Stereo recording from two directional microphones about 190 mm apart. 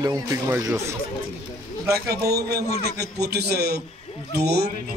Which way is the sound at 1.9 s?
55° right (ahead or behind).